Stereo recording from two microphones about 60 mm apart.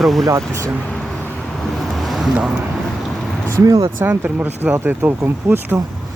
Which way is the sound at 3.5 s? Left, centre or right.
Right.